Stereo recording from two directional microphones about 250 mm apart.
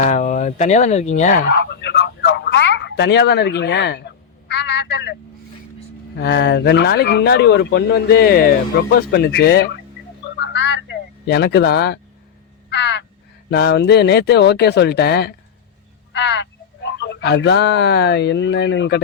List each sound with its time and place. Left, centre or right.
0.1 s a sound: left
6.1 s speech: left
10.4 s fowl: left
12.7 s crow: left
13.5 s speech: left